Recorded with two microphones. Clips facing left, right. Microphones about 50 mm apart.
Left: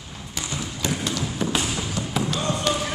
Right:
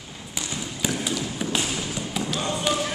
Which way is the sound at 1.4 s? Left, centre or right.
Centre.